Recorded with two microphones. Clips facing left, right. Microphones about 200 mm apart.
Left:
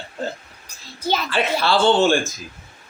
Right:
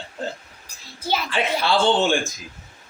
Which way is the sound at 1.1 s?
10° right (ahead or behind).